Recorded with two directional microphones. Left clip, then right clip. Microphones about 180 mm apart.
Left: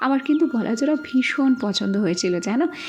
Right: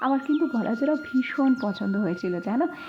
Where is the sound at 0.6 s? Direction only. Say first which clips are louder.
Left 3 dB; 15° left (ahead or behind).